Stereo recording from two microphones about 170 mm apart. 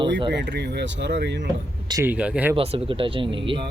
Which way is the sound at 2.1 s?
5° right (ahead or behind).